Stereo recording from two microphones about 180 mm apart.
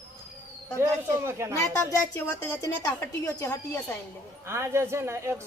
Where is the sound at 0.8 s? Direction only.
15° right (ahead or behind).